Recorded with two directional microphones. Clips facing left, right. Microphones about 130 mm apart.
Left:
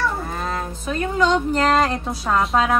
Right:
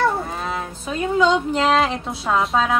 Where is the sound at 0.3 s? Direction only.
5° right (ahead or behind).